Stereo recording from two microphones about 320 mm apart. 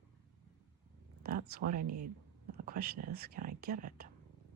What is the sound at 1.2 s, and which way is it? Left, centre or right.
Speech, right.